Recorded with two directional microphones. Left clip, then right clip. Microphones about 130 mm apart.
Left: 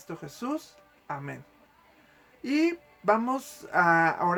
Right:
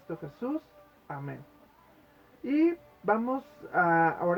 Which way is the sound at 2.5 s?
25° left (ahead or behind).